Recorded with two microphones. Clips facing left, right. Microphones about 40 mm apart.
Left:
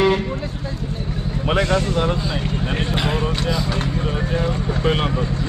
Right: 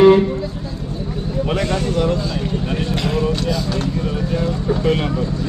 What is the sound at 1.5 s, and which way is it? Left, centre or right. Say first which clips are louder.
Speech: left 3 dB; left.